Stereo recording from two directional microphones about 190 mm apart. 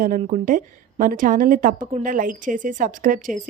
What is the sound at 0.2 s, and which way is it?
A woman's voice, 40° right (ahead or behind).